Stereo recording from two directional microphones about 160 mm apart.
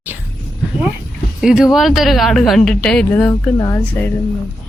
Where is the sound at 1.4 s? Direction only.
Centre (ahead or behind).